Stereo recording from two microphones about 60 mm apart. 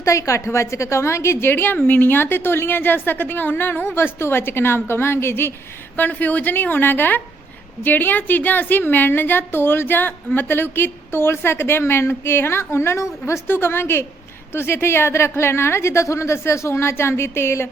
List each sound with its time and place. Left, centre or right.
0.0 s a woman's voice: left
6.0 s a woman's voice: left
13.5 s a woman's voice: left